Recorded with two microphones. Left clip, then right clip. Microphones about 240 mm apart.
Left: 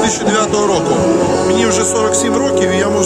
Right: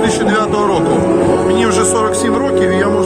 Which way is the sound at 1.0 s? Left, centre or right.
Left.